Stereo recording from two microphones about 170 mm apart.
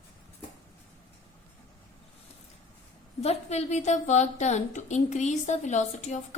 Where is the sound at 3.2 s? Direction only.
40° left (ahead or behind).